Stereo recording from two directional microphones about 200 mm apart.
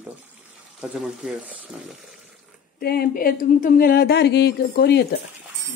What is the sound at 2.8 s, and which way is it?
Speech, 50° left (ahead or behind).